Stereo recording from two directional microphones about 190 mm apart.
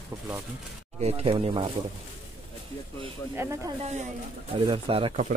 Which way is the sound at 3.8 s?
35° right (ahead or behind).